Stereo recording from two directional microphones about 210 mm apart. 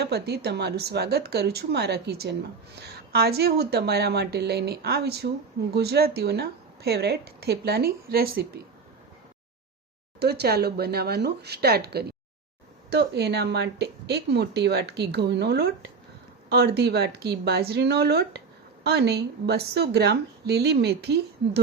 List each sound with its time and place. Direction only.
0.0 s speech: 50° right (ahead or behind)
10.2 s speech: 50° right (ahead or behind)